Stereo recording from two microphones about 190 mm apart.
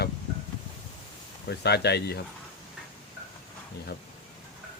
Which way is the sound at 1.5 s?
60° left (ahead or behind).